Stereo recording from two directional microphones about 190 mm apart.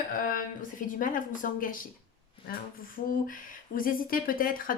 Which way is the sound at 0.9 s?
45° left (ahead or behind).